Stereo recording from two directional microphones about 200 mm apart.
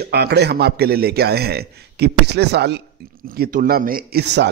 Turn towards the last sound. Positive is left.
turn(degrees=-55)  # may be behind; listen again after turning